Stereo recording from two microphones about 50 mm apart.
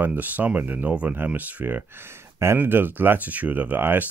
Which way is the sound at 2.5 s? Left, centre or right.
Right.